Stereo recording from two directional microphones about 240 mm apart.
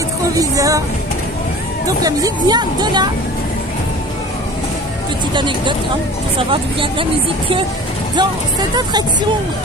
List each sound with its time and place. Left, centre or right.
0.3 s speech: centre
1.9 s speech: centre
5.3 s speech: centre